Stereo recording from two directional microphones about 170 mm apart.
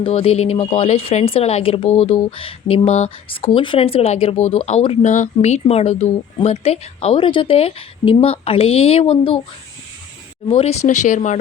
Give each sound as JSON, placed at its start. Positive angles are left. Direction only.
{"t": 0.0, "sound": "a woman's voice", "side_deg": 35}
{"t": 10.5, "sound": "speech", "side_deg": 35}